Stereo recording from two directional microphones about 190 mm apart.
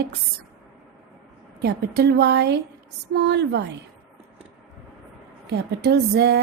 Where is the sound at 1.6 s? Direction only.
60° right (ahead or behind).